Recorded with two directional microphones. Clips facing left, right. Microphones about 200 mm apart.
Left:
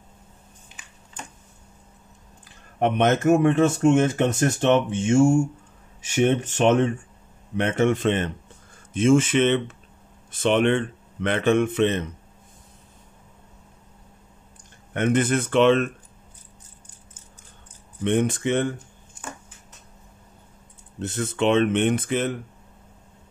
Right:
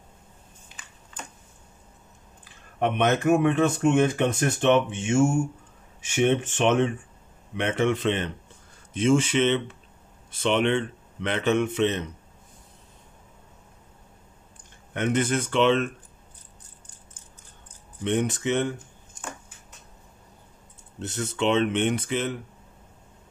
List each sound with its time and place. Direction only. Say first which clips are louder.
2.4 s speech: left 3 dB; 50° left (ahead or behind)
5.9 s speech: left 2 dB; 45° left (ahead or behind)
15.0 s speech: left 3 dB; 55° left (ahead or behind)
18.0 s speech: left 3 dB; 55° left (ahead or behind)
21.0 s speech: left 3 dB; 55° left (ahead or behind)